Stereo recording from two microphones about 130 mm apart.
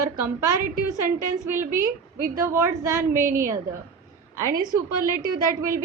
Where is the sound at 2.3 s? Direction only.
25° right (ahead or behind).